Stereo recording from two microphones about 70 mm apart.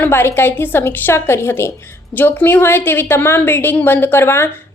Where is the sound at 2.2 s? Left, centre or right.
Left.